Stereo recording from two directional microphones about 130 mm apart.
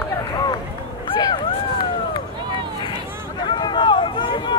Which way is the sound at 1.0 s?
40° left (ahead or behind).